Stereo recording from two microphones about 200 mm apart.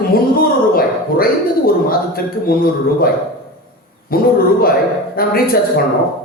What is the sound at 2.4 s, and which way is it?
Speech, 50° left (ahead or behind).